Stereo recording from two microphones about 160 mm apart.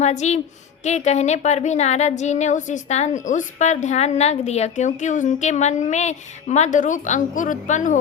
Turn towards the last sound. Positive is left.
turn(degrees=50)  # may be behind; listen again after turning